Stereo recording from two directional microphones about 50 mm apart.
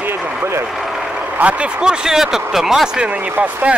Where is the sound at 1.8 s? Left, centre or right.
Centre.